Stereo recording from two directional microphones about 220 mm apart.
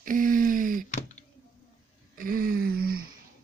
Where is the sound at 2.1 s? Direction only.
40° right (ahead or behind).